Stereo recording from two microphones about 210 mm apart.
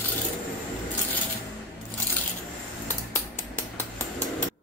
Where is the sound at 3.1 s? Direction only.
10° left (ahead or behind).